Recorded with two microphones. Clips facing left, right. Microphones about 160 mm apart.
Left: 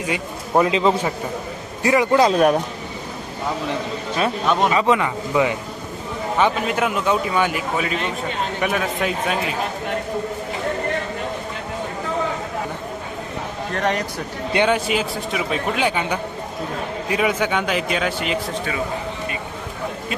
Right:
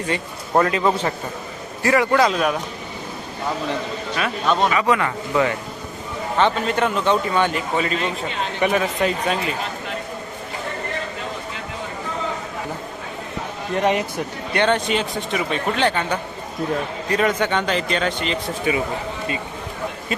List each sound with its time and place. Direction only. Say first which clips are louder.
0.0 s a man's voice: even; 10° left (ahead or behind)
2.3 s speech: left 5 dB; 40° left (ahead or behind)
4.4 s a man's voice: right 1 dB; 10° left (ahead or behind)
4.7 s a man's voice: left 1 dB; 25° left (ahead or behind); by 9.6 s 5° left (ahead or behind)
13.7 s a man's voice: right 3 dB; 10° right (ahead or behind)
14.5 s a man's voice: left 1 dB; 10° left (ahead or behind)